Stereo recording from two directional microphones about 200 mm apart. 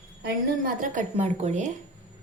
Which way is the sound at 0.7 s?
35° right (ahead or behind).